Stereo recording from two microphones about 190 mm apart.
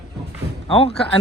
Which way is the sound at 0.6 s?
30° left (ahead or behind).